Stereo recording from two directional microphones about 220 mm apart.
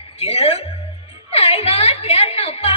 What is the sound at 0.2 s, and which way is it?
Speech, 25° left (ahead or behind).